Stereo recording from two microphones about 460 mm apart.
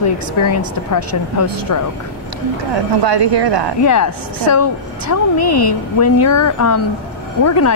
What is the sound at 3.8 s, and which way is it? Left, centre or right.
A woman's voice, left.